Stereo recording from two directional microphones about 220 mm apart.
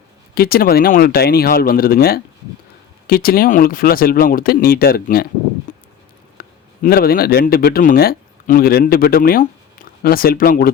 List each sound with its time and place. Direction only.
0.3 s speech: 45° left (ahead or behind)
5.7 s a sound: 35° left (ahead or behind)
6.8 s speech: 45° left (ahead or behind)